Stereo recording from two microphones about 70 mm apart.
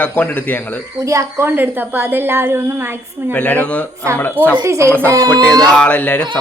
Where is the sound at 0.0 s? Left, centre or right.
Left.